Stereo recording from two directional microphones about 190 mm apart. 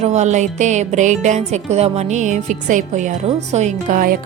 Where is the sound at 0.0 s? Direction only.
35° right (ahead or behind).